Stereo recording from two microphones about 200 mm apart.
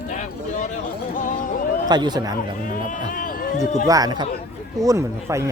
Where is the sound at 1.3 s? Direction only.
40° left (ahead or behind).